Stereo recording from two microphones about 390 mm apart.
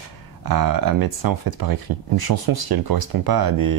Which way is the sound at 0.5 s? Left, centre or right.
Right.